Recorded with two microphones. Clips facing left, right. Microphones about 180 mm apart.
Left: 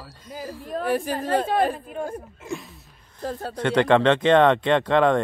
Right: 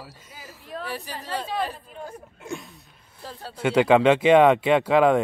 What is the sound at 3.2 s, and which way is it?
Speech, 50° left (ahead or behind).